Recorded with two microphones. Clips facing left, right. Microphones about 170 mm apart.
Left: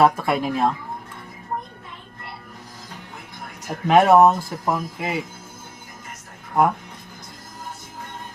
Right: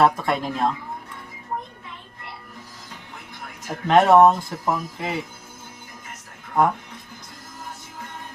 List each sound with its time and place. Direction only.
0.0 s speech: 5° left (ahead or behind)
3.7 s speech: 5° left (ahead or behind)